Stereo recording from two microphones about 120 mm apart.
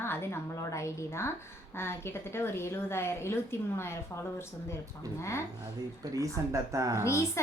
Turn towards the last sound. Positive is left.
turn(degrees=25)  # may be behind; listen again after turning